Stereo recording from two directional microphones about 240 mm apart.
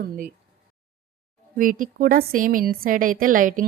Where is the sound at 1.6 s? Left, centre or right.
Right.